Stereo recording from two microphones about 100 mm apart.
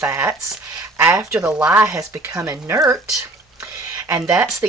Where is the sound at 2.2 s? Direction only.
30° right (ahead or behind).